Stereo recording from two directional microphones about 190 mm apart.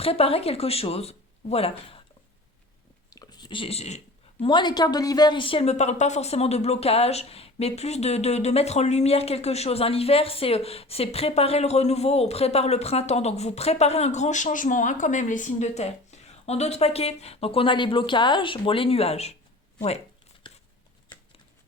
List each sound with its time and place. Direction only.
0.0 s a woman's voice: 30° left (ahead or behind)
3.1 s a woman's voice: 20° left (ahead or behind)